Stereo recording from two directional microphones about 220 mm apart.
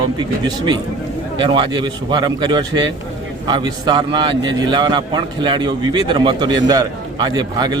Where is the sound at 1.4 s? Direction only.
20° right (ahead or behind).